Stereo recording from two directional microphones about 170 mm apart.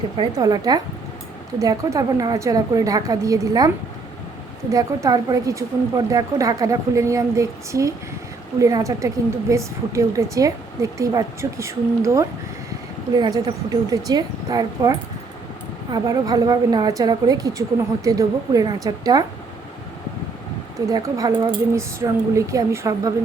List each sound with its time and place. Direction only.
0.2 s a woman's voice: 20° right (ahead or behind)
5.0 s a woman's voice: 20° right (ahead or behind)
20.8 s a woman's voice: 20° right (ahead or behind)